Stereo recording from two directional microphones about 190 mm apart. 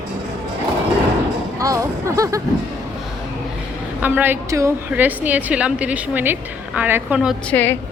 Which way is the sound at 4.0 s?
10° right (ahead or behind).